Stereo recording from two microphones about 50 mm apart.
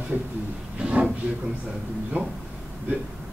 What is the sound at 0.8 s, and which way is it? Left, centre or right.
Speech, right.